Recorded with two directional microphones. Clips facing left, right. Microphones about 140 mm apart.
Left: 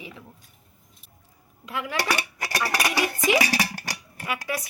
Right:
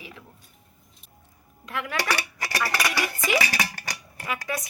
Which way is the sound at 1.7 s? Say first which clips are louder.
Left 1 dB; 10° left (ahead or behind).